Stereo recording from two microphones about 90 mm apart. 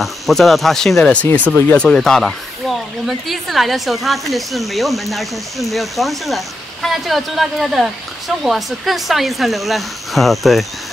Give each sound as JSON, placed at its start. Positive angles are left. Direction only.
{"t": 0.0, "sound": "speech", "side_deg": 0}
{"t": 1.1, "sound": "speech", "side_deg": 15}